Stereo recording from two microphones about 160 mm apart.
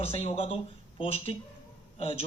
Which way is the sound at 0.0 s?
35° left (ahead or behind).